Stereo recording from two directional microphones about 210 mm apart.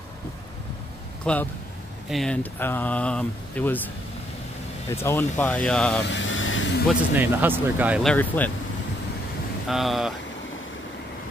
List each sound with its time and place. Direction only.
1.2 s speech: 5° left (ahead or behind)
4.9 s speech: 10° left (ahead or behind)
6.0 s vehicle: 60° left (ahead or behind)
7.2 s speech: 10° right (ahead or behind)
8.1 s speech: 10° left (ahead or behind)
9.7 s speech: centre (ahead or behind)